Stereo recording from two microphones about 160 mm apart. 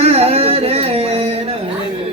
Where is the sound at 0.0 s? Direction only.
40° right (ahead or behind).